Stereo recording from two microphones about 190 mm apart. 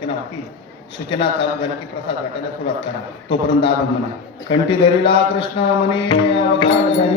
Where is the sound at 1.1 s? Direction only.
30° left (ahead or behind).